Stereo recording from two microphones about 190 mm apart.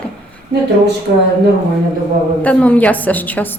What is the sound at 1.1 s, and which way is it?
Speech, 60° right (ahead or behind).